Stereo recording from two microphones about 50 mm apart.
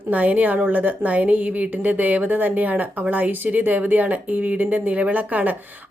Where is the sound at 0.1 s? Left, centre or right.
Right.